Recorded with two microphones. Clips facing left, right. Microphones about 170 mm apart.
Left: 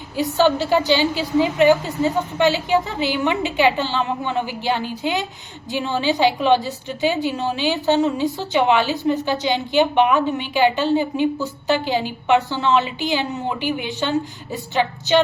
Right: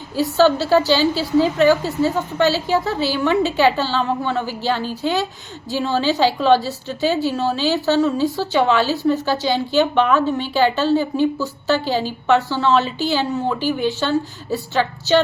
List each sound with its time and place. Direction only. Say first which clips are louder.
0.3 s a woman's voice: right 3 dB; 15° left (ahead or behind)